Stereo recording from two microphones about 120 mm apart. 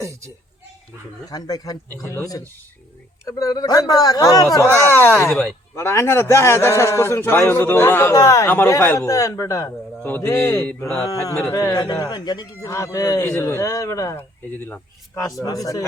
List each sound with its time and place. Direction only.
1.3 s a man's voice: 35° left (ahead or behind)
10.0 s a man's voice: 15° left (ahead or behind)
14.5 s speech: 15° left (ahead or behind)
15.2 s a man's voice: 30° left (ahead or behind)